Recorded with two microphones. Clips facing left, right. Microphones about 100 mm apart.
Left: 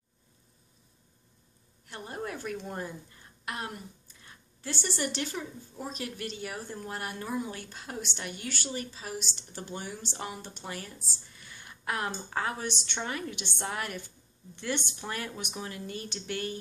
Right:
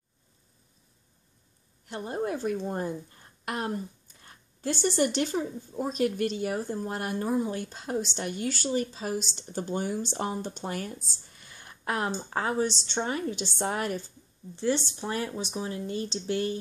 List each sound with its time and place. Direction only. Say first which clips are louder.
1.9 s a woman's voice: right 7 dB; 30° right (ahead or behind)
15.0 s speech: right 5 dB; 25° right (ahead or behind)